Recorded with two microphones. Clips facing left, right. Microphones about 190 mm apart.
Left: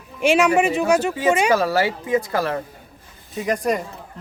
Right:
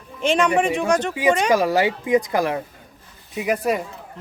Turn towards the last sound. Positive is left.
turn(degrees=-5)  # may be behind; listen again after turning